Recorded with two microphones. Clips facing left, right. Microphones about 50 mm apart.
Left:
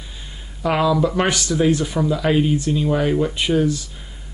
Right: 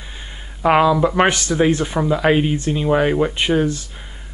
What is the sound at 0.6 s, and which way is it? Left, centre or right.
Speech, right.